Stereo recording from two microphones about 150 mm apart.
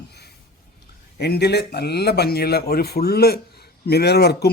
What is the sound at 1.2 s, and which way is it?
Speech, 90° left.